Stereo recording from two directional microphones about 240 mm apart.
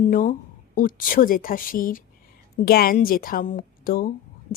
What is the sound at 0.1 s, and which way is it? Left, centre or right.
Speech, left.